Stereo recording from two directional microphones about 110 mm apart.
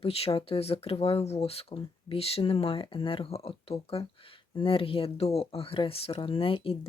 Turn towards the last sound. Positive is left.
turn(degrees=60)  # may be behind; listen again after turning